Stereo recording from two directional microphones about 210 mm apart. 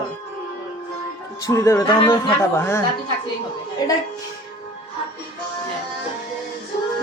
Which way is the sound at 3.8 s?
20° left (ahead or behind).